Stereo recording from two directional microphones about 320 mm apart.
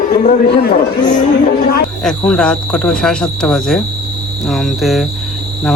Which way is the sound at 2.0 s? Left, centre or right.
Centre.